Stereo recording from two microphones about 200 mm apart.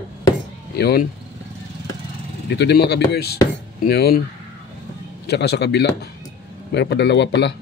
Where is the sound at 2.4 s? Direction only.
60° left (ahead or behind).